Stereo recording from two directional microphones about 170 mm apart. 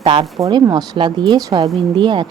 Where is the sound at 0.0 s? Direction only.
30° right (ahead or behind).